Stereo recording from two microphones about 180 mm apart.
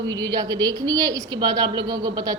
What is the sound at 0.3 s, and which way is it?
A woman's voice, 20° right (ahead or behind).